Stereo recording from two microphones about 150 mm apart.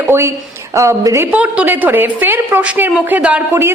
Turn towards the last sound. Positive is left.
turn(degrees=-15)  # may be behind; listen again after turning